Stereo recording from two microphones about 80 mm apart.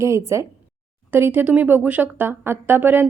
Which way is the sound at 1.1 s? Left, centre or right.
Right.